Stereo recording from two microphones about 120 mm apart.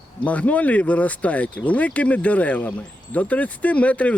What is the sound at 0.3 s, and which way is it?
Speech, 10° left (ahead or behind).